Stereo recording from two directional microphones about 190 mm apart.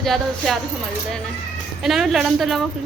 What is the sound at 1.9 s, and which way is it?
Speech, centre (ahead or behind).